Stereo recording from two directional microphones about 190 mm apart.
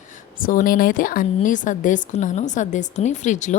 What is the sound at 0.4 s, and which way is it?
A woman's voice, 50° left (ahead or behind).